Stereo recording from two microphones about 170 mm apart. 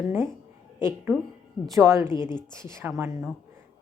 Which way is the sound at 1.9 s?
15° right (ahead or behind).